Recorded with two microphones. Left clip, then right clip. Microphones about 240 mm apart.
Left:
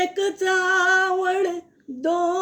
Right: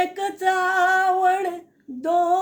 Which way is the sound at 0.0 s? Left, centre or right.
Centre.